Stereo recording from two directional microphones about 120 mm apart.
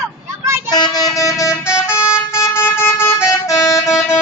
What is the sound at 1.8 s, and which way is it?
Vehicle, 20° left (ahead or behind).